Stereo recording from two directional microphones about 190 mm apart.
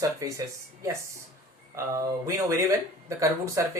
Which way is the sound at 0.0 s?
15° right (ahead or behind).